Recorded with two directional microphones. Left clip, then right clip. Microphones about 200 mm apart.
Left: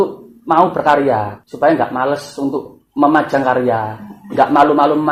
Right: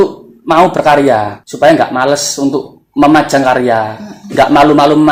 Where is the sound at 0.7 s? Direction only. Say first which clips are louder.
Right 5 dB; 45° right (ahead or behind).